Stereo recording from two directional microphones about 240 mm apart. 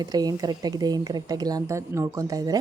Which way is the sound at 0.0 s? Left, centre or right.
Centre.